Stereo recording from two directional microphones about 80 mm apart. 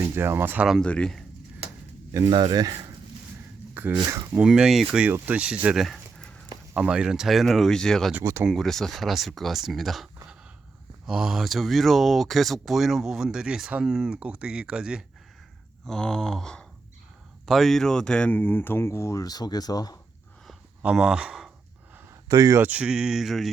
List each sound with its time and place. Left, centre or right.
0.0 s speech: right
0.8 s speech: centre
2.3 s speech: right
3.8 s a sound: right
4.3 s speech: centre
5.7 s speech: centre
6.1 s dog: centre
6.7 s speech: centre
8.2 s speech: right
8.5 s speech: centre
15.9 s speech: centre; by 20.0 s left
20.8 s speech: centre
22.3 s speech: right
22.6 s speech: centre